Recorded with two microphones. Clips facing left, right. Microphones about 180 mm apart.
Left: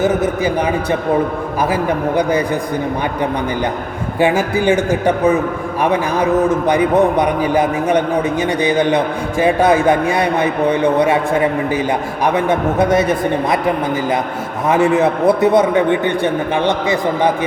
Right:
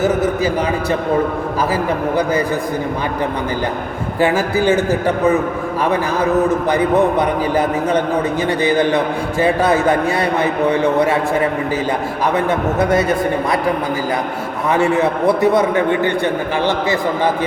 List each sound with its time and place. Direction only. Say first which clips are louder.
0.0 s a man's voice: even; 20° left (ahead or behind)
4.2 s a man's voice: left 1 dB; 15° left (ahead or behind)
6.7 s a man's voice: left 1 dB; 15° left (ahead or behind)
12.2 s a man's voice: left 2 dB; 20° left (ahead or behind)
14.7 s a man's voice: left 2 dB; 20° left (ahead or behind)